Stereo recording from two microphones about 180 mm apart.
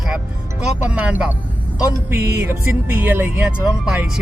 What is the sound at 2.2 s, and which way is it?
Music, 65° right (ahead or behind).